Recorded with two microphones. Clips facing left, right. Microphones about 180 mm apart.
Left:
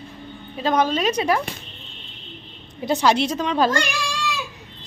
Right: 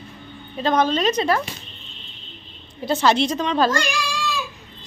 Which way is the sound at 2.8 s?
15° left (ahead or behind).